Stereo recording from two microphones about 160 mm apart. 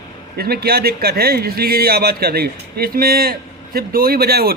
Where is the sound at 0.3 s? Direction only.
75° right (ahead or behind).